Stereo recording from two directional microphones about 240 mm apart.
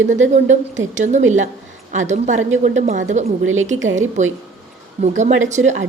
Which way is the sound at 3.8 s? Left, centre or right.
Right.